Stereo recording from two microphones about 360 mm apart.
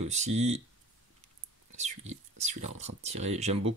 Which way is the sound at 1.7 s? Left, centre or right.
Centre.